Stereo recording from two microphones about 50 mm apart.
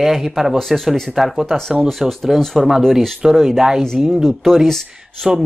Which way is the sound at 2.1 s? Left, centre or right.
Centre.